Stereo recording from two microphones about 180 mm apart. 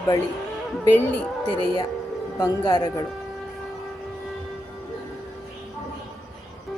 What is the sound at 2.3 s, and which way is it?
Speech, 20° left (ahead or behind).